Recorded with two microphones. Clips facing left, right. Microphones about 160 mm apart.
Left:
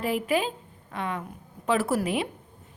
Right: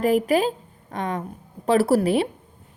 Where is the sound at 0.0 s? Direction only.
40° right (ahead or behind).